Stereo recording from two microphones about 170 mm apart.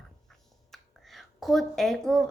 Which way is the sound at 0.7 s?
Centre (ahead or behind).